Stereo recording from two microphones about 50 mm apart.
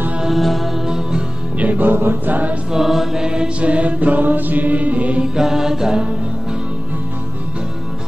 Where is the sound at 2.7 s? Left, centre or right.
Centre.